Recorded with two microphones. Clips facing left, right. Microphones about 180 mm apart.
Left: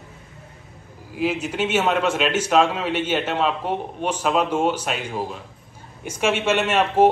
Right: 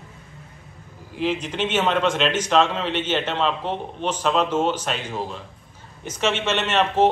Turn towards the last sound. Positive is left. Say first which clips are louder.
# left 2 dB
turn(degrees=10)  # may be behind; listen again after turning